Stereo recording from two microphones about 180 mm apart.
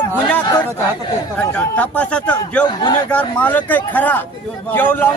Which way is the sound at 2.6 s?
25° left (ahead or behind).